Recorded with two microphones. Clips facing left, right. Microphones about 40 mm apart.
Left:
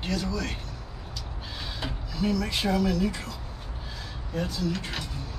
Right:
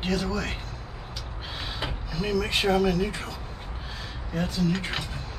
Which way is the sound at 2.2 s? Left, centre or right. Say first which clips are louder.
Right 2 dB; right.